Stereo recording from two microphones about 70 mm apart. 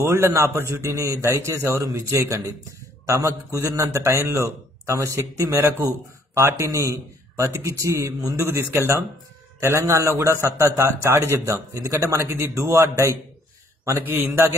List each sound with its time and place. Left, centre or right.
0.0 s a man's voice: right
1.8 s a man's voice: right